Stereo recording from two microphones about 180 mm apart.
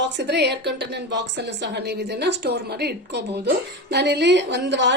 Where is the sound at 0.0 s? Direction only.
70° right (ahead or behind).